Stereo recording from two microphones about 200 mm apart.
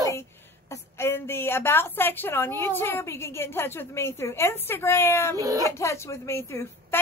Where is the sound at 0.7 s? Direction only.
15° left (ahead or behind).